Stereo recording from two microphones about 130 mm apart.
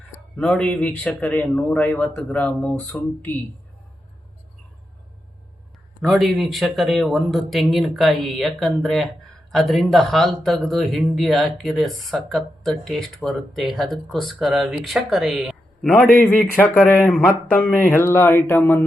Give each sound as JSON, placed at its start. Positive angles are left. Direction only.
{"t": 0.3, "sound": "a man's voice", "side_deg": 5}
{"t": 6.0, "sound": "speech", "side_deg": 0}
{"t": 15.9, "sound": "a man's voice", "side_deg": 10}